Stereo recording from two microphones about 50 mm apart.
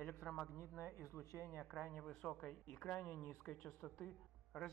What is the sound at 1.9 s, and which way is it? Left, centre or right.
A man's voice, centre.